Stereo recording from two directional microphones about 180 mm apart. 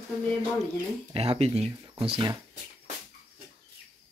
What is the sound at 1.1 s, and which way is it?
Speech, 35° right (ahead or behind).